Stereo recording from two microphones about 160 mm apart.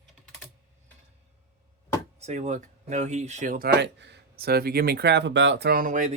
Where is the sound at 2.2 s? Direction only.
45° right (ahead or behind).